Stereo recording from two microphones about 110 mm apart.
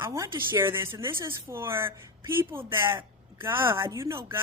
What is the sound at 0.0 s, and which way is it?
Speech, 25° right (ahead or behind).